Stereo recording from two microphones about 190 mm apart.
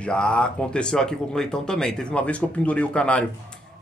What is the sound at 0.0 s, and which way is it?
Speech, 5° left (ahead or behind).